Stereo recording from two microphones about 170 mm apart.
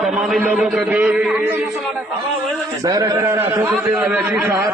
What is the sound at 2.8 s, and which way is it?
A man's voice, 20° right (ahead or behind).